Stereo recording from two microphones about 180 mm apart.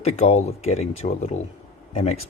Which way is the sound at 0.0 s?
35° left (ahead or behind).